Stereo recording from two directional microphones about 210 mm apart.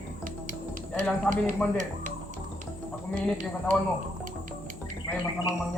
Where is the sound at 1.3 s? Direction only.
5° left (ahead or behind).